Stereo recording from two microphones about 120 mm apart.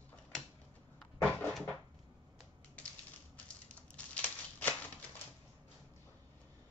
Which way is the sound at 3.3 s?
10° left (ahead or behind).